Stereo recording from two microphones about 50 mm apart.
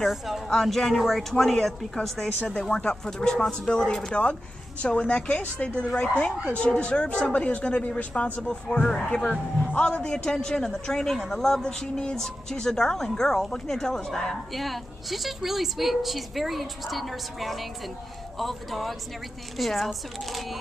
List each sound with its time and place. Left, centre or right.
0.5 s speech: centre; by 8.1 s left
8.1 s speech: centre